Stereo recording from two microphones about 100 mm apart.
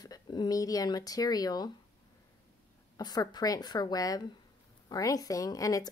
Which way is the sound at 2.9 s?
40° left (ahead or behind).